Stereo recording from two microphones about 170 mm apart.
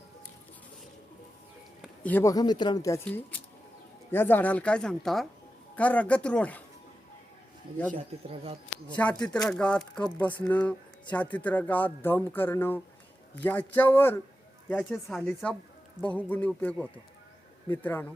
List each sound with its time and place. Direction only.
2.0 s speech: 15° left (ahead or behind)
9.0 s speech: 5° left (ahead or behind)
14.8 s speech: centre (ahead or behind)
15.2 s speech: 10° left (ahead or behind)